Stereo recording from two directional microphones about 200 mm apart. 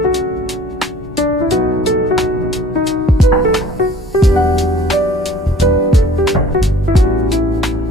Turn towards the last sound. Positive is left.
turn(degrees=0)  # may be behind; listen again after turning